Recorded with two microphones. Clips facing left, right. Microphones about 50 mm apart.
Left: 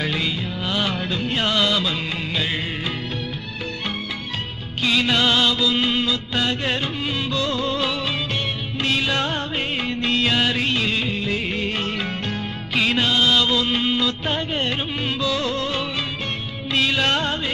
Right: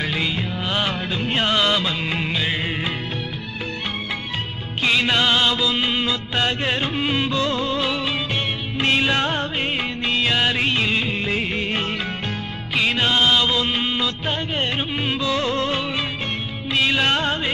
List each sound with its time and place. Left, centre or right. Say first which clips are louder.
0.0 s music: even; centre
0.4 s music: right 1 dB; centre
4.8 s music: right 1 dB; centre
6.0 s music: right 1 dB; right
7.6 s music: right 1 dB; centre
8.8 s music of bollywood: right 3 dB; right
12.3 s music: left 1 dB; centre
13.0 s music: right 1 dB; right
13.3 s music: even; centre
16.8 s music of bollywood: right 2 dB; centre